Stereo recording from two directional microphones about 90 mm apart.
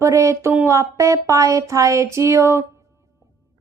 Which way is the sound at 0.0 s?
35° right (ahead or behind).